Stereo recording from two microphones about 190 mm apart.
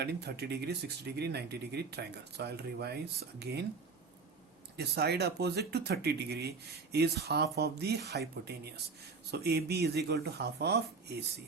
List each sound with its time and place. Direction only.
0.0 s speech: 60° right (ahead or behind)
4.8 s speech: 60° right (ahead or behind)